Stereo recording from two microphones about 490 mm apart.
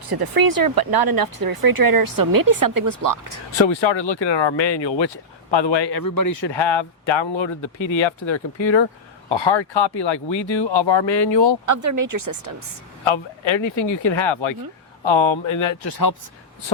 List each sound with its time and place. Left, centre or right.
0.1 s speech: right
3.7 s a man's voice: left
6.5 s speech: left
11.6 s speech: right
13.1 s speech: left
13.7 s speech: left
14.1 s speech: left
15.8 s a man's voice: left